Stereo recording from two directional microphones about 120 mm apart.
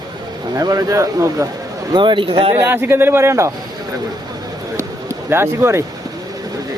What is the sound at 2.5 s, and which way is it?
Speech, 20° right (ahead or behind).